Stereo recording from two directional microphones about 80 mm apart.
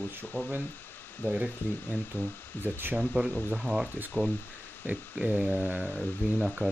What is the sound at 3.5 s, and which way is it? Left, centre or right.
Speech, centre.